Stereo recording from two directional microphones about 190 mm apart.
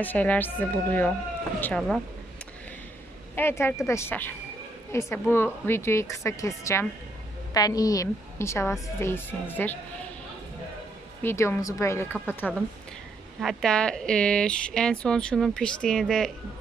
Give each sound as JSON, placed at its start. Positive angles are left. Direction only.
{"t": 0.0, "sound": "a woman's voice", "side_deg": 10}
{"t": 3.3, "sound": "a woman's voice", "side_deg": 10}
{"t": 11.2, "sound": "a woman's voice", "side_deg": 15}
{"t": 12.4, "sound": "speech", "side_deg": 5}